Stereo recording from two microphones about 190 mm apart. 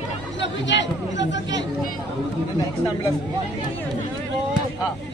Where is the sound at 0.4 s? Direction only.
70° left (ahead or behind).